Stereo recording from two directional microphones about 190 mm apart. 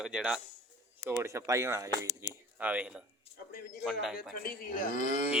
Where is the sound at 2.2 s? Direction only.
15° right (ahead or behind).